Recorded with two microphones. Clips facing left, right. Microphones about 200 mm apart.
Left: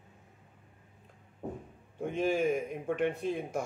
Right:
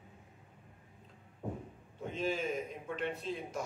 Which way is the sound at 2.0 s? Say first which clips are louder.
Left 7 dB; 55° left (ahead or behind).